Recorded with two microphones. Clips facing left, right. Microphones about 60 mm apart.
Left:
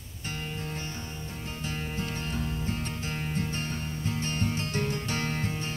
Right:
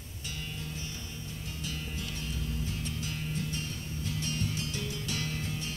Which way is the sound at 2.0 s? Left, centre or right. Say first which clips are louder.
Left 6 dB; left.